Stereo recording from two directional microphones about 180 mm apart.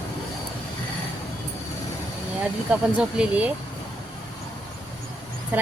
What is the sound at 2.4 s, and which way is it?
Speech, 5° right (ahead or behind).